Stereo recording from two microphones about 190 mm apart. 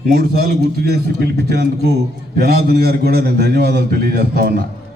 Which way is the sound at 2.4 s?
55° right (ahead or behind).